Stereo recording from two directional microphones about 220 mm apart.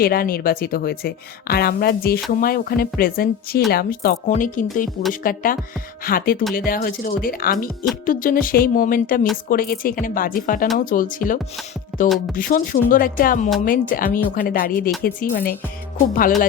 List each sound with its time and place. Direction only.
0.0 s speech: 40° left (ahead or behind)